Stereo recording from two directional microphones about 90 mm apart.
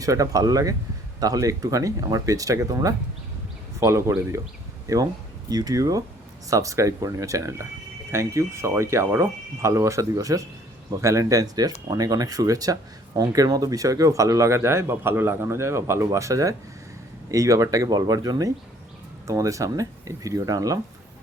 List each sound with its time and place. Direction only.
0.0 s speech: 40° right (ahead or behind)